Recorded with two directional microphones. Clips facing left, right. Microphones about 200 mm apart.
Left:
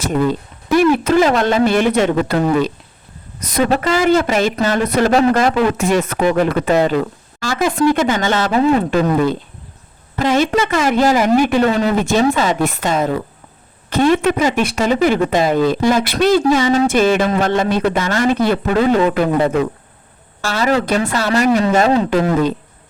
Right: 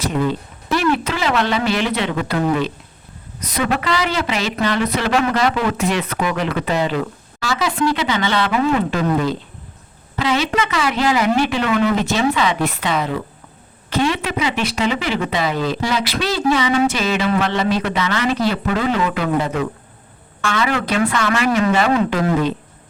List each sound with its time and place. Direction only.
0.9 s speech: 45° left (ahead or behind)
11.7 s speech: 35° left (ahead or behind)
20.4 s speech: 35° left (ahead or behind)